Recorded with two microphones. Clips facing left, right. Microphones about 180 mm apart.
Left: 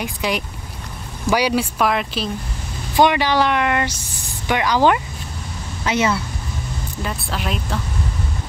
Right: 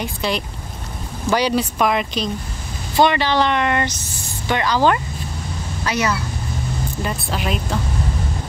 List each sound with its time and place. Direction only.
0.0 s speech: 10° left (ahead or behind)
3.0 s speech: 15° left (ahead or behind)
7.0 s speech: centre (ahead or behind)